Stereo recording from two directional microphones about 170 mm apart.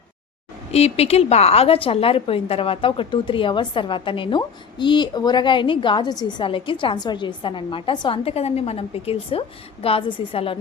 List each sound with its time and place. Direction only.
0.7 s a woman's voice: 40° left (ahead or behind)